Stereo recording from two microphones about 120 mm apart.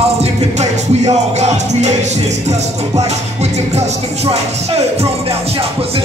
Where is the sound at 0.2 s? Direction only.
65° right (ahead or behind).